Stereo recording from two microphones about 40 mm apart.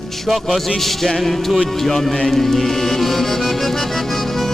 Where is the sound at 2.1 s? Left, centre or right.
Centre.